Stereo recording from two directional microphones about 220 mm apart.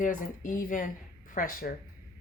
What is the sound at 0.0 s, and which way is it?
Speech, 35° left (ahead or behind).